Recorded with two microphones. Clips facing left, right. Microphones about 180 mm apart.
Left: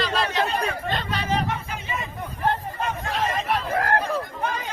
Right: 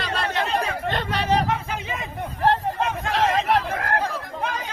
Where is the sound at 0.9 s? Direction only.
65° right (ahead or behind); by 3.6 s 90° right.